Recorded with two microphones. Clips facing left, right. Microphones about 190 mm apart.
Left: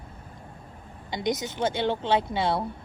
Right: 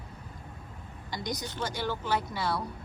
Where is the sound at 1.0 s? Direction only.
20° left (ahead or behind).